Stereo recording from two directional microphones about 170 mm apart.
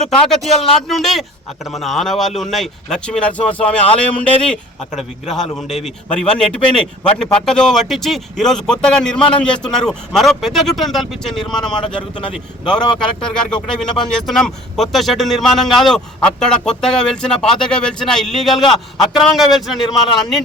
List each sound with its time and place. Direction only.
0.3 s speech: centre (ahead or behind)
11.7 s speech: 30° left (ahead or behind)
12.3 s speech: 5° left (ahead or behind)